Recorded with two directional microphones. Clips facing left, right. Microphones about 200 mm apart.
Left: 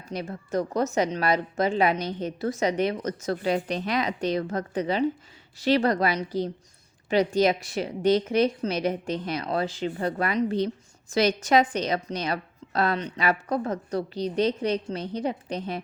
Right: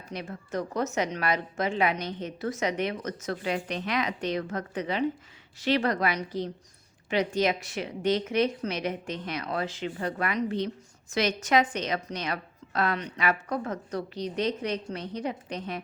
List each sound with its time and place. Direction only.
0.1 s a woman's voice: 35° left (ahead or behind)